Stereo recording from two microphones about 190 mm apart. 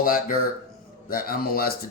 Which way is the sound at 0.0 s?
50° left (ahead or behind).